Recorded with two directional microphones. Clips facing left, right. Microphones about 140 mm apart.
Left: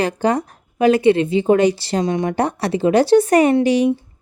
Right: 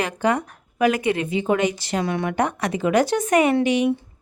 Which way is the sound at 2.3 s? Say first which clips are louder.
Left 3 dB; 35° left (ahead or behind).